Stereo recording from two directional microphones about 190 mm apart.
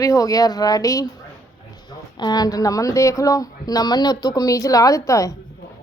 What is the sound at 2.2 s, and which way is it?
A woman's voice, 20° left (ahead or behind).